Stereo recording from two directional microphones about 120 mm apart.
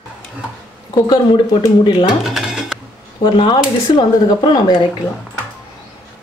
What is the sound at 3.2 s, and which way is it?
Speech, 40° left (ahead or behind).